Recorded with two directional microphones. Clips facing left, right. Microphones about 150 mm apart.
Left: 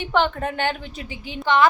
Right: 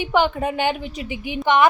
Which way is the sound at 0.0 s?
10° right (ahead or behind).